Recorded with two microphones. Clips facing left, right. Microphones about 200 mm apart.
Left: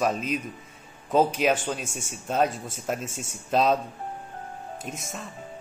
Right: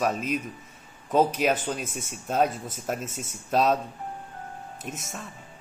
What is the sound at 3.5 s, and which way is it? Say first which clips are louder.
Speech: left 1 dB; 5° right (ahead or behind).